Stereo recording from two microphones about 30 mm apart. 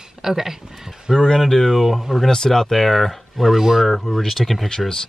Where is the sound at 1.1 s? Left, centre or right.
Left.